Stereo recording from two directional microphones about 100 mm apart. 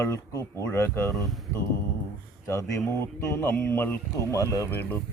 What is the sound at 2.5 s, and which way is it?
Speech, 30° left (ahead or behind).